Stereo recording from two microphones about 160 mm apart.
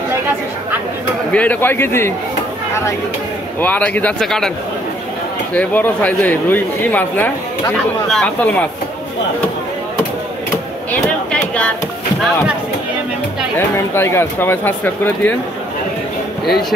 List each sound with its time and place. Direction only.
1.3 s speech: 10° left (ahead or behind)
3.6 s speech: 10° left (ahead or behind)
5.5 s speech: 10° left (ahead or behind)
10.9 s a sound: 5° left (ahead or behind)
13.7 s speech: 15° left (ahead or behind)